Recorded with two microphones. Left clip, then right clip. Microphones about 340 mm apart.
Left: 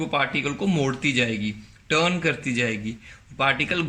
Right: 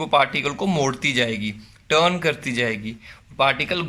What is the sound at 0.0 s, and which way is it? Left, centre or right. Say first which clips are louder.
A man's voice: right 5 dB; centre.